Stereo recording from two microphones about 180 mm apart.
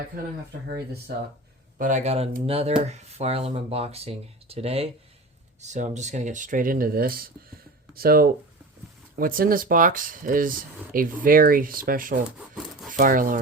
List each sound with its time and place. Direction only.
1.8 s speech: 40° right (ahead or behind)
12.4 s rub: centre (ahead or behind)
12.9 s speech: 50° right (ahead or behind)